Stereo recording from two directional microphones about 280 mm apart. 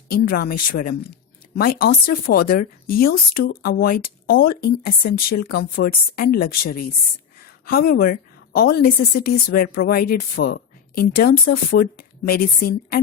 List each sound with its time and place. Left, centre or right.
0.1 s a woman's voice: left